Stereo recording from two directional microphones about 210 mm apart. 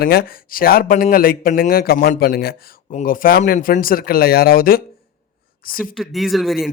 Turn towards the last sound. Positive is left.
turn(degrees=0)  # may be behind; listen again after turning